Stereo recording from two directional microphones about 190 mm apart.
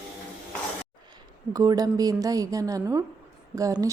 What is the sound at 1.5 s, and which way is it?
A woman's voice, 20° right (ahead or behind).